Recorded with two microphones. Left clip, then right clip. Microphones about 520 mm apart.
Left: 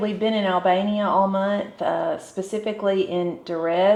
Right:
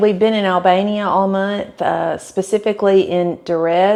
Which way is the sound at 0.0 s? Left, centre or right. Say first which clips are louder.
Right 9 dB; right.